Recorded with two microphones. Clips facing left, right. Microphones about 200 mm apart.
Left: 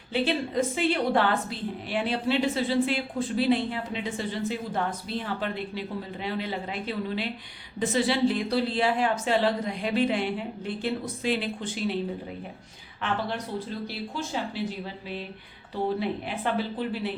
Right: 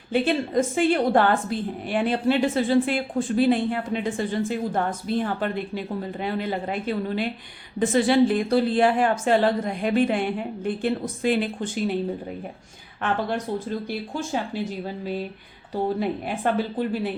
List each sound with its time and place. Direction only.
0.1 s a woman's voice: 50° right (ahead or behind)
13.8 s a woman's voice: 50° right (ahead or behind)